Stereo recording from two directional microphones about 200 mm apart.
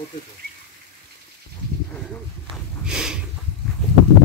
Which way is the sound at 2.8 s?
5° right (ahead or behind).